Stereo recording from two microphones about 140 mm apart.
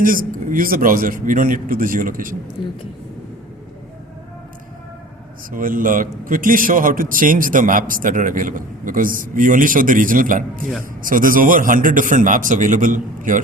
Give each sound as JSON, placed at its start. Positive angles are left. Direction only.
{"t": 0.0, "sound": "a man's voice", "side_deg": -75}
{"t": 5.5, "sound": "a man's voice", "side_deg": -80}